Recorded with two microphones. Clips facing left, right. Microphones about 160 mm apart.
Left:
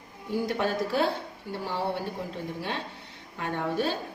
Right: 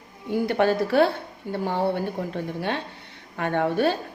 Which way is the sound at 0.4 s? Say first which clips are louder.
Right 8 dB; 65° right (ahead or behind).